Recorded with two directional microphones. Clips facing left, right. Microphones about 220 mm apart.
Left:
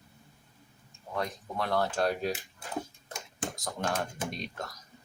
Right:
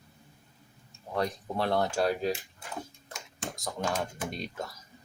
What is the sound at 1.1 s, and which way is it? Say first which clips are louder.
Speech: right 3 dB; 30° right (ahead or behind).